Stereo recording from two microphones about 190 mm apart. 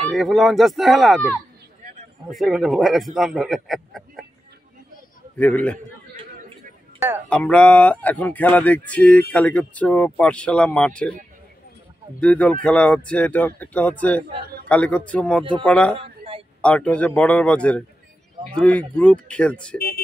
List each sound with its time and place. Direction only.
0.1 s speech: centre (ahead or behind)
5.4 s speech: 10° left (ahead or behind)
7.2 s speech: 5° left (ahead or behind)
12.2 s speech: 5° left (ahead or behind)
16.0 s a sound: 30° right (ahead or behind)
16.6 s speech: 5° left (ahead or behind)